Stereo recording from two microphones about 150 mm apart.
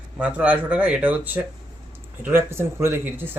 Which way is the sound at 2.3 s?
15° right (ahead or behind).